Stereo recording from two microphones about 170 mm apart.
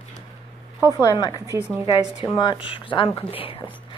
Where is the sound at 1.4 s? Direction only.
20° right (ahead or behind).